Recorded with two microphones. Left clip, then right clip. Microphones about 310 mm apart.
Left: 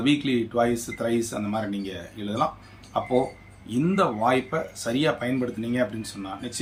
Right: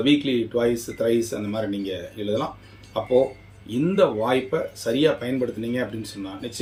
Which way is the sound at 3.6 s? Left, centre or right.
Centre.